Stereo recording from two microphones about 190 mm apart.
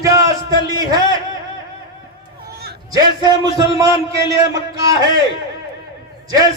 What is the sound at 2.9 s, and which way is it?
A man's voice, 20° right (ahead or behind).